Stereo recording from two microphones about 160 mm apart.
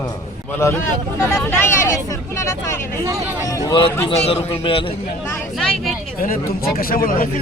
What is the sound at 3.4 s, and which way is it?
Speech, 20° left (ahead or behind).